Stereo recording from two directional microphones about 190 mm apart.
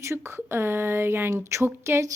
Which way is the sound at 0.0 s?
15° right (ahead or behind).